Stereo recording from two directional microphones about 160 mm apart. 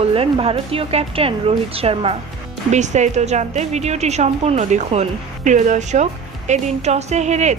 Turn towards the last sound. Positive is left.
turn(degrees=-45)  # may be behind; listen again after turning